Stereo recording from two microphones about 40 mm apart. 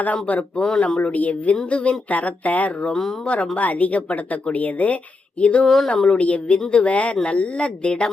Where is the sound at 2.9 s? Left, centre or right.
Centre.